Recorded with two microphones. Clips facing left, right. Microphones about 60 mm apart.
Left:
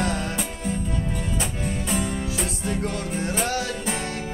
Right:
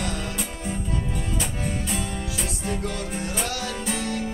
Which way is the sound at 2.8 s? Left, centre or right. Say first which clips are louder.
Left 2 dB; left.